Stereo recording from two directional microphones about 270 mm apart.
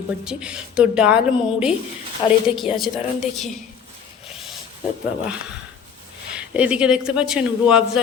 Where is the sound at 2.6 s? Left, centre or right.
Centre.